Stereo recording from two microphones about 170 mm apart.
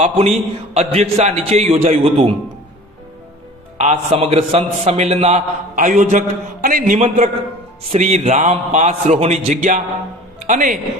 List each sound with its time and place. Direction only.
0.0 s a man's voice: 40° right (ahead or behind)
3.8 s a man's voice: 40° right (ahead or behind)